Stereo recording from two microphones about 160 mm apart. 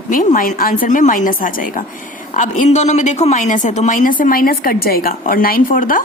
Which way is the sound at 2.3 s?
50° left (ahead or behind).